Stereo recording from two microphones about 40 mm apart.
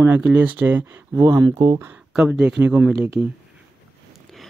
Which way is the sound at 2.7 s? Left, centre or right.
Right.